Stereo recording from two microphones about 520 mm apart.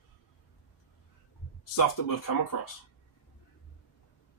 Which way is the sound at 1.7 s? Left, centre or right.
Left.